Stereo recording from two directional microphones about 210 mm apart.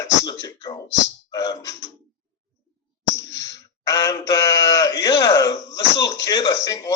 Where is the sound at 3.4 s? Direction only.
15° left (ahead or behind).